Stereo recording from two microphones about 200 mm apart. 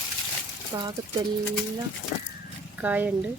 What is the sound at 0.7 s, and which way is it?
Speech, 20° right (ahead or behind).